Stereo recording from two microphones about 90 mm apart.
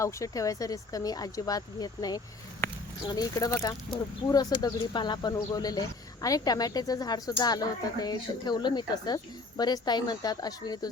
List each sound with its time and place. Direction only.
0.0 s speech: 35° left (ahead or behind)
2.6 s a sound: 20° left (ahead or behind)
3.1 s speech: 45° left (ahead or behind)